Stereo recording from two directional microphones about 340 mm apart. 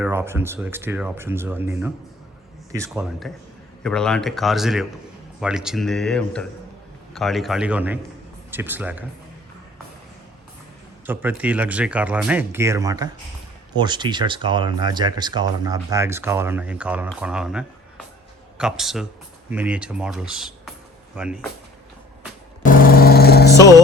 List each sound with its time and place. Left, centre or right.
0.0 s speech: centre
11.0 s speech: centre
22.6 s vehicle: left